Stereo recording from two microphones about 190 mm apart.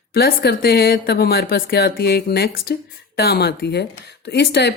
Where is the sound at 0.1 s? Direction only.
55° left (ahead or behind).